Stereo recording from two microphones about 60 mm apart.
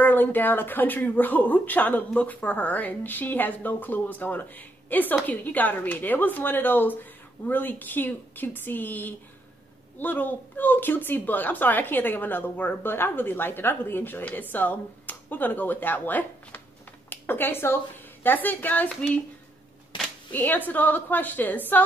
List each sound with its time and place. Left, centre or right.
0.0 s speech: left
20.3 s speech: left